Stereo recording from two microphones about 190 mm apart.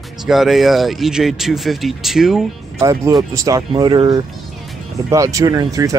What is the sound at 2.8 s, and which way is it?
Speech, 15° right (ahead or behind).